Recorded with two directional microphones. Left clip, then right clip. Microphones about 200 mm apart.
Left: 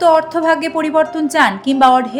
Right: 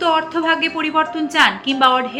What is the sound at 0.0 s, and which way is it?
A woman's voice, 50° left (ahead or behind).